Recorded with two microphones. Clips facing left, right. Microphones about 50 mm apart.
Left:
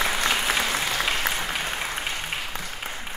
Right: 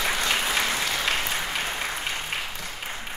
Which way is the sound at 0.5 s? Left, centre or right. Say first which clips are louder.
Left 1 dB; centre.